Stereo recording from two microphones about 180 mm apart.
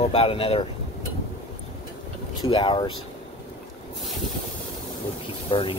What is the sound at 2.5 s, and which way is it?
Speech, 25° left (ahead or behind).